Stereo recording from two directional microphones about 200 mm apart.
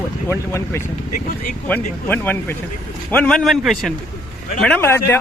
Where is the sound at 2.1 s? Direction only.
10° left (ahead or behind).